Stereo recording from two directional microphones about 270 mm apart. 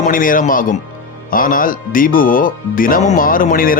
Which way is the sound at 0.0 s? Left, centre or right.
Left.